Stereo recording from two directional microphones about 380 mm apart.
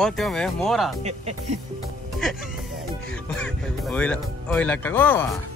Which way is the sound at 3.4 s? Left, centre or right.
Centre.